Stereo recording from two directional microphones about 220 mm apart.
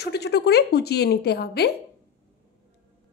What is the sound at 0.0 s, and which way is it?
A woman's voice, 50° left (ahead or behind).